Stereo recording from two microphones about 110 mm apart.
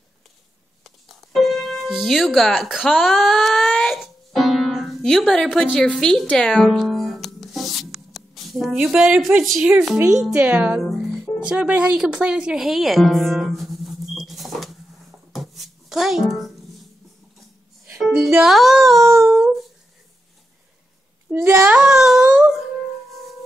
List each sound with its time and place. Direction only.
0.8 s music: centre (ahead or behind)
8.8 s speech: 5° right (ahead or behind)
10.3 s speech: 15° right (ahead or behind)
10.8 s speech: centre (ahead or behind)
15.3 s music: centre (ahead or behind)
18.0 s music: centre (ahead or behind)
18.4 s speech: 5° right (ahead or behind)
18.9 s a sound: 25° right (ahead or behind)
21.3 s speech: 25° right (ahead or behind)
21.7 s a sound: 5° right (ahead or behind)